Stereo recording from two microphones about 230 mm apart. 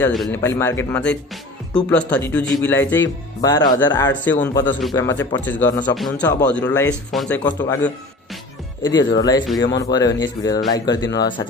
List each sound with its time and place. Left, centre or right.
0.0 s a man's voice: centre
8.8 s speech: centre